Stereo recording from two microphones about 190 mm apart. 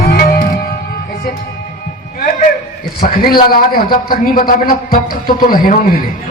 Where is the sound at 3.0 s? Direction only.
50° left (ahead or behind).